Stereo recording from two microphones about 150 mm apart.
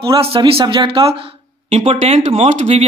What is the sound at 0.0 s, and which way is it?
Speech, 35° right (ahead or behind).